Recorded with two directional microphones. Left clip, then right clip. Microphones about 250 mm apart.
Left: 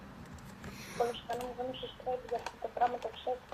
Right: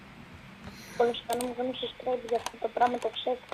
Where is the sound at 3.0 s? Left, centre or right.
Right.